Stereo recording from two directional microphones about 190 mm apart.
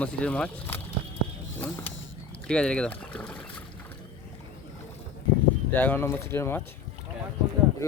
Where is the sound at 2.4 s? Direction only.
5° left (ahead or behind).